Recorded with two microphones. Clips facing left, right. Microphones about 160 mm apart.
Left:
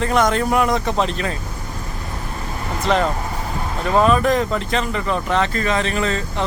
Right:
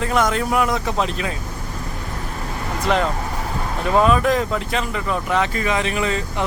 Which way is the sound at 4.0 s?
5° right (ahead or behind).